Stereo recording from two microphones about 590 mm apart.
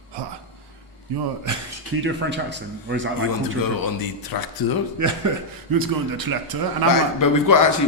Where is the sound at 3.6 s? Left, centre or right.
Left.